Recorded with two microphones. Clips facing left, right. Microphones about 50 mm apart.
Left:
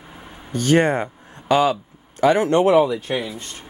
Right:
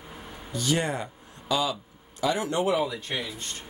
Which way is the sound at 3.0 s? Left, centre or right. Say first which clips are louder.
Left 8 dB; centre.